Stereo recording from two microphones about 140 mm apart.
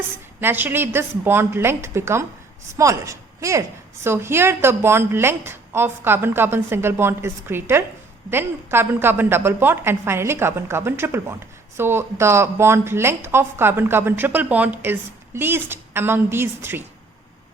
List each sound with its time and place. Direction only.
0.3 s a woman's voice: 15° right (ahead or behind)